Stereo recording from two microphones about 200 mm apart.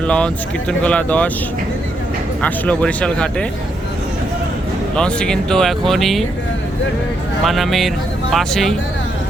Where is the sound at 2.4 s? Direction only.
5° left (ahead or behind).